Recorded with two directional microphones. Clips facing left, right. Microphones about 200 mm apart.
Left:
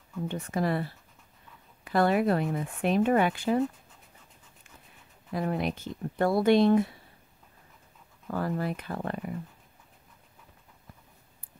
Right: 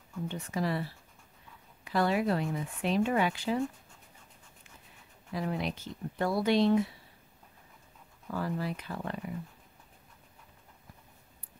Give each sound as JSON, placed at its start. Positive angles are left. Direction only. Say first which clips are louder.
{"t": 0.3, "sound": "speech", "louder": "left 4 dB", "side_deg": 50}
{"t": 1.9, "sound": "speech", "louder": "left 4 dB", "side_deg": 55}
{"t": 5.3, "sound": "speech", "louder": "left 4 dB", "side_deg": 50}
{"t": 8.3, "sound": "speech", "louder": "left 4 dB", "side_deg": 50}